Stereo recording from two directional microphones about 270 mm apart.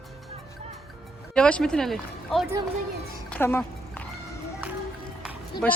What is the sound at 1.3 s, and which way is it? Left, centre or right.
Speech, centre.